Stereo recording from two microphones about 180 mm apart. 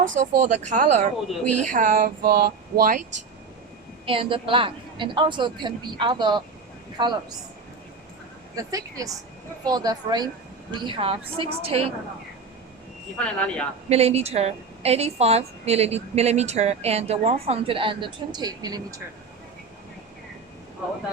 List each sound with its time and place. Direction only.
0.0 s speech: 45° right (ahead or behind)
4.0 s a woman's voice: 30° right (ahead or behind)
8.5 s a woman's voice: 20° right (ahead or behind)
13.1 s speech: 5° left (ahead or behind)
13.9 s a woman's voice: 35° right (ahead or behind)